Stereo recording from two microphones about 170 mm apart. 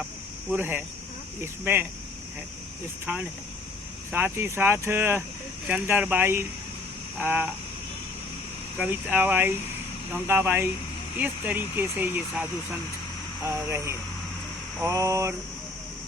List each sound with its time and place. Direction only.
0.5 s speech: 10° right (ahead or behind)
3.1 s speech: 10° right (ahead or behind)
8.8 s speech: 10° right (ahead or behind)